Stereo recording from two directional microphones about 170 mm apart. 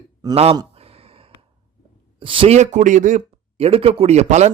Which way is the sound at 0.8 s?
35° right (ahead or behind).